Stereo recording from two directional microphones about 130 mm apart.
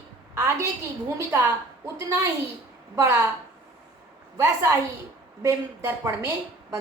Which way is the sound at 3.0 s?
20° right (ahead or behind).